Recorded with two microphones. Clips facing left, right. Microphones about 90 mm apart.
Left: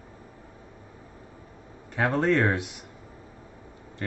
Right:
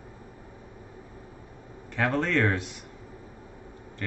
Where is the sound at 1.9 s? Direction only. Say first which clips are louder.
Left 2 dB; 15° left (ahead or behind).